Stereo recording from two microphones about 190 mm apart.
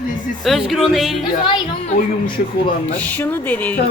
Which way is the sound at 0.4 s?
Centre (ahead or behind).